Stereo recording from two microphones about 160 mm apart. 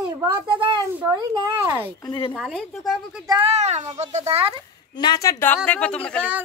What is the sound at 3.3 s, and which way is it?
A child's voice, 35° right (ahead or behind).